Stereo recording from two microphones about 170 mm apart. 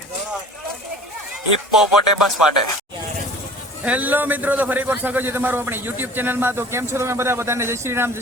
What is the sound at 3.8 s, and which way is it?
A man's voice, 10° right (ahead or behind).